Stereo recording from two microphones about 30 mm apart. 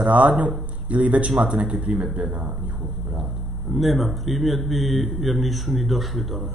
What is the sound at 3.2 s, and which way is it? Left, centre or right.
Speech, centre.